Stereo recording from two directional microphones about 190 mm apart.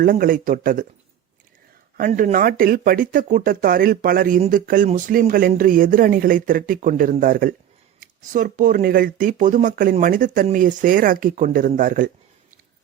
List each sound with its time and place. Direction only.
0.0 s speech: 50° right (ahead or behind)
2.0 s speech: 45° right (ahead or behind)